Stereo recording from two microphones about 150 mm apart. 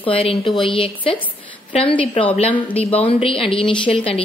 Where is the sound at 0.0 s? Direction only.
40° left (ahead or behind).